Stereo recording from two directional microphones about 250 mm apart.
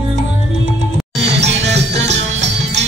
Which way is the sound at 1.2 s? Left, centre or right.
Right.